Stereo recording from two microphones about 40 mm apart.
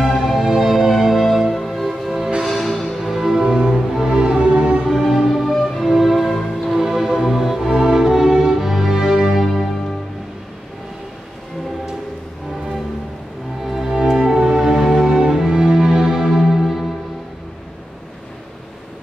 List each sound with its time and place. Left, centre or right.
0.0 s music: centre
3.2 s music: centre
4.8 s music: centre
13.7 s music: centre
15.1 s music: centre